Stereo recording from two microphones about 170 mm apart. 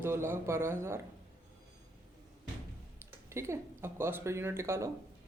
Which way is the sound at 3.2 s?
15° right (ahead or behind).